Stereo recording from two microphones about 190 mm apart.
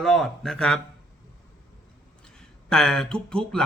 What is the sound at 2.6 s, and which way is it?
Speech, 5° left (ahead or behind).